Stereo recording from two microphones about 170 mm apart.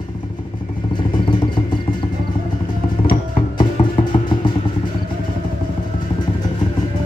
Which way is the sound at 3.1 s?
30° left (ahead or behind).